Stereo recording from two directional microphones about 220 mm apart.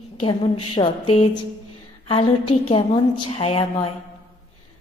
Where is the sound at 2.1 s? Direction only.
25° left (ahead or behind).